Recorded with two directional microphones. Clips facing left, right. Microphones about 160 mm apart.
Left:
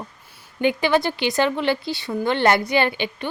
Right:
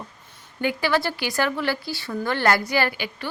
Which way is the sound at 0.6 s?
20° left (ahead or behind).